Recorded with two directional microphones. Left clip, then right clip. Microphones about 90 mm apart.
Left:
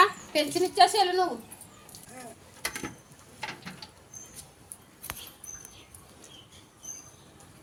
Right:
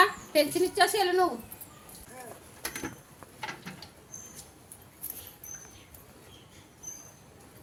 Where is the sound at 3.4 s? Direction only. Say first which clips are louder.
Left 1 dB; 30° left (ahead or behind).